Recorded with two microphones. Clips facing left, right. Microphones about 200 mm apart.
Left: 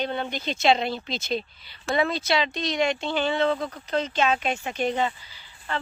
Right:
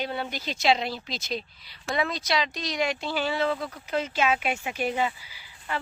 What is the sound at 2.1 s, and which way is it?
Speech, 30° left (ahead or behind).